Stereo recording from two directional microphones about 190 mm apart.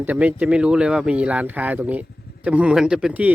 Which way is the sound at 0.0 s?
10° right (ahead or behind).